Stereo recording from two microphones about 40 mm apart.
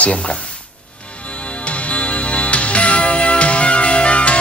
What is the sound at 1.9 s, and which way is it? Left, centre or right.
Music, left.